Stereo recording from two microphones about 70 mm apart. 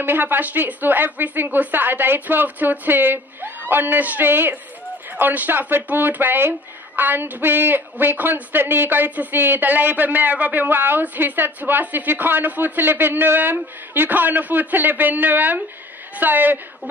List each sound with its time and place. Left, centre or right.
0.0 s a woman's voice: right